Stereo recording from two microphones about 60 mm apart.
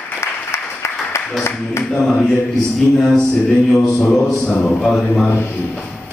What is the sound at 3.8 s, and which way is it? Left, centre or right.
Speech, centre.